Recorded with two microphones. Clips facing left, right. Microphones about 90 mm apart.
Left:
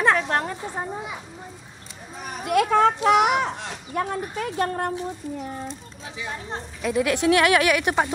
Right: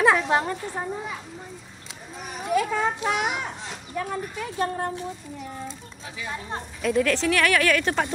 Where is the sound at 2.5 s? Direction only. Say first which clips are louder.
Left 5 dB; 70° left (ahead or behind); by 4.9 s 50° left (ahead or behind).